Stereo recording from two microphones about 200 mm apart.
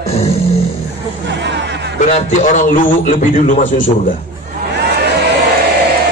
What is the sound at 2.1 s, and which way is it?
A man's voice, 35° left (ahead or behind).